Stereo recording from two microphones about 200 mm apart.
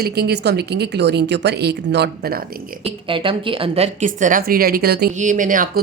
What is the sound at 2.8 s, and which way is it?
A woman's voice, 25° right (ahead or behind).